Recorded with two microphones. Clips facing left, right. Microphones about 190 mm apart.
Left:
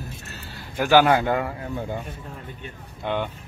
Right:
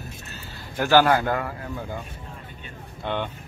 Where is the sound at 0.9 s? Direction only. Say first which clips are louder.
Left 1 dB; 20° left (ahead or behind).